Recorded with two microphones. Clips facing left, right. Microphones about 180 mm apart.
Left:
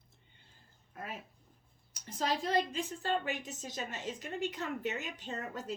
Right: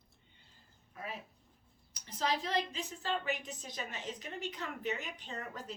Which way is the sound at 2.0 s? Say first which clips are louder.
Left 1 dB; 45° left (ahead or behind).